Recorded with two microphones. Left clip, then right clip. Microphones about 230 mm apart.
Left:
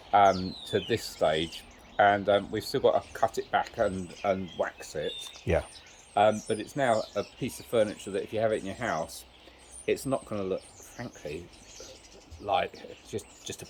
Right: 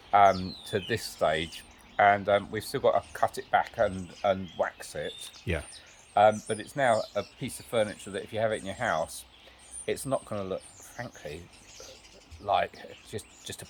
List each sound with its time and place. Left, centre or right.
0.1 s speech: right
5.5 s speech: centre
6.1 s speech: right
9.9 s speech: right
12.5 s speech: right